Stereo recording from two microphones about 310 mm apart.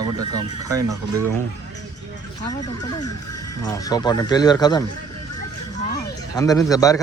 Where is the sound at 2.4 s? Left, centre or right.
Centre.